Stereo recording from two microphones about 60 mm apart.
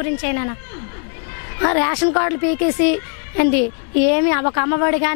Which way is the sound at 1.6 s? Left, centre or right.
Left.